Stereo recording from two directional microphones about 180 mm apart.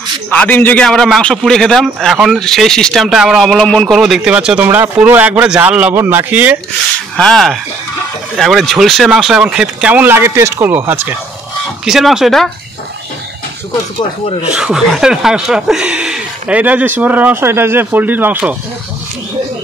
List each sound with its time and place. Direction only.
0.3 s a man's voice: 10° left (ahead or behind); by 6.6 s 10° right (ahead or behind)
7.2 s a man's voice: 5° left (ahead or behind)
14.5 s speech: 5° right (ahead or behind)